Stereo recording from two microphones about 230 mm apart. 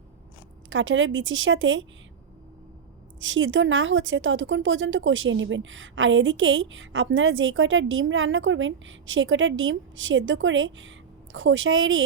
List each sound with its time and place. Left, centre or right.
0.7 s a woman's voice: right
3.2 s a woman's voice: right